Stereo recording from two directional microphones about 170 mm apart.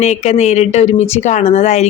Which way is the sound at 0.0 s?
40° left (ahead or behind).